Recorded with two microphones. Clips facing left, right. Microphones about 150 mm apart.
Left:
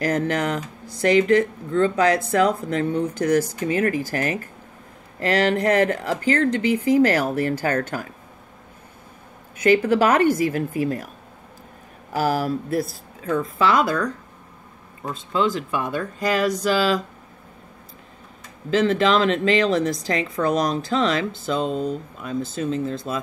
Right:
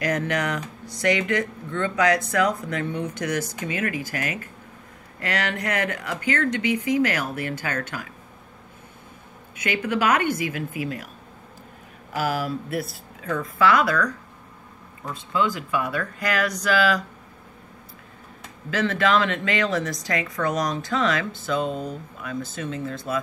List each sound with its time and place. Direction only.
0.1 s speech: 30° left (ahead or behind)
9.6 s speech: 35° left (ahead or behind)
12.1 s speech: 35° left (ahead or behind)
18.9 s speech: 30° left (ahead or behind)